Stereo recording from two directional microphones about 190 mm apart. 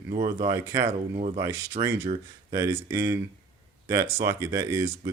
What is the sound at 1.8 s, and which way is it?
Speech, 35° right (ahead or behind).